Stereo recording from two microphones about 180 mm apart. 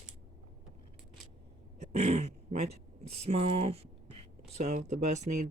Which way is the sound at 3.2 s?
35° right (ahead or behind).